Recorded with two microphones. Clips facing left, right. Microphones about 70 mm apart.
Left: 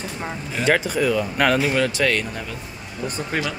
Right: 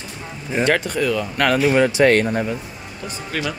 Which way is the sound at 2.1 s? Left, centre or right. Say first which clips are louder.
Right 8 dB; right.